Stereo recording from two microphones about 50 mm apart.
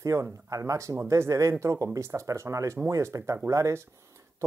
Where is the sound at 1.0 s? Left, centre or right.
Right.